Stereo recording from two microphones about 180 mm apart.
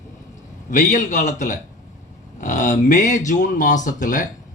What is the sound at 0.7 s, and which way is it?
A man's voice, 40° left (ahead or behind).